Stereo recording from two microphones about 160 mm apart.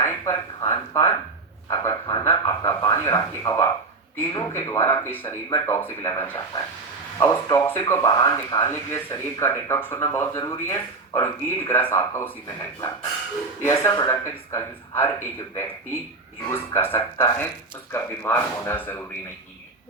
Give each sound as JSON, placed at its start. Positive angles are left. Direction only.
{"t": 0.0, "sound": "a sound", "side_deg": 20}
{"t": 2.5, "sound": "speech", "side_deg": 25}
{"t": 13.6, "sound": "speech", "side_deg": 20}